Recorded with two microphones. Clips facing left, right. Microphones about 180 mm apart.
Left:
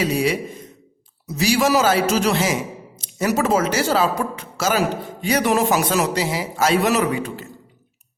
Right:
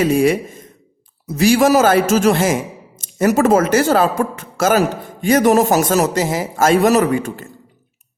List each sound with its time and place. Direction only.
0.0 s a man's voice: 50° right (ahead or behind)